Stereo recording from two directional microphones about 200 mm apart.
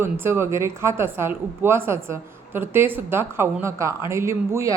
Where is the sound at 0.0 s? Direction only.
10° right (ahead or behind).